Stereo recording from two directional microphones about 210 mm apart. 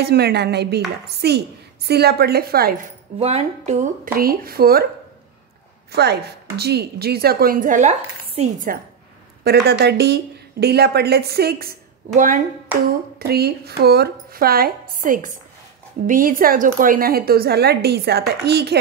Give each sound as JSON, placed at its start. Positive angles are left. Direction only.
{"t": 0.0, "sound": "a woman's voice", "side_deg": -50}
{"t": 3.2, "sound": "a woman's voice", "side_deg": -30}
{"t": 5.9, "sound": "a woman's voice", "side_deg": -50}
{"t": 9.4, "sound": "a woman's voice", "side_deg": -50}
{"t": 12.1, "sound": "a woman's voice", "side_deg": -35}
{"t": 13.2, "sound": "a woman's voice", "side_deg": -50}